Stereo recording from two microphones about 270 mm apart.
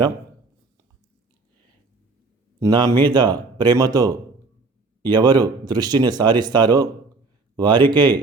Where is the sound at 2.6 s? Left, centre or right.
Centre.